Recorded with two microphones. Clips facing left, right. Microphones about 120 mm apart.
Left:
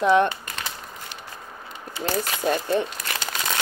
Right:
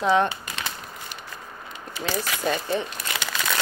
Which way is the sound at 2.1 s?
50° left (ahead or behind).